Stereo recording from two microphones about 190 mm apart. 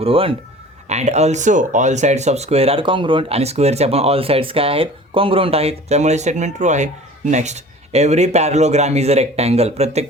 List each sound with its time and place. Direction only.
0.0 s speech: 30° right (ahead or behind)